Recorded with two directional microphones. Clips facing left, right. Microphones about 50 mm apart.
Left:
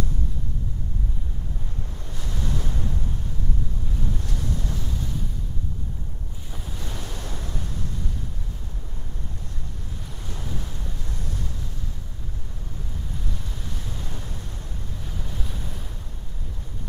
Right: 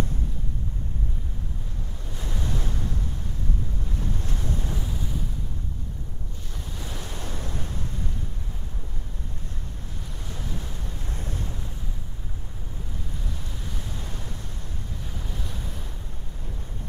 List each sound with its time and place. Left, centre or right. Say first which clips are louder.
2.1 s waves: left 1 dB; centre
4.3 s vehicle: left 1 dB; right; by 5.2 s centre
6.5 s waves: left 1 dB; centre
10.2 s boat: left 1 dB; centre
11.1 s waves: right 1 dB; right
13.1 s waves: left 1 dB; centre